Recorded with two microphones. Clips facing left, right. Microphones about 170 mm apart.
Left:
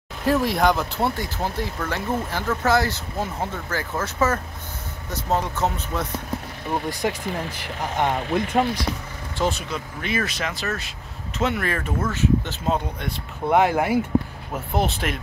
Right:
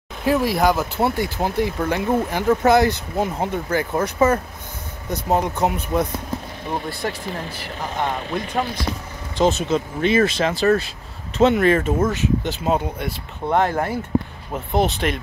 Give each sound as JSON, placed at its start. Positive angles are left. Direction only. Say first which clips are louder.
{"t": 0.2, "sound": "speech", "louder": "right 2 dB", "side_deg": 0}
{"t": 1.9, "sound": "speech", "louder": "right 6 dB", "side_deg": -15}
{"t": 7.0, "sound": "speech", "louder": "left 1 dB", "side_deg": 20}
{"t": 9.4, "sound": "speech", "louder": "right 7 dB", "side_deg": -25}
{"t": 13.5, "sound": "speech", "louder": "left 1 dB", "side_deg": 10}